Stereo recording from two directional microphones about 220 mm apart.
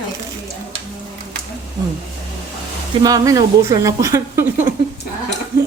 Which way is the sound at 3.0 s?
15° right (ahead or behind).